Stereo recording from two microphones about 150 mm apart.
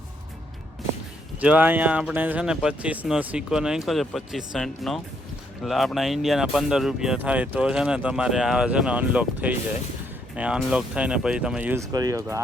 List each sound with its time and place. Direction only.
1.4 s speech: 10° right (ahead or behind)
11.9 s speech: 25° right (ahead or behind)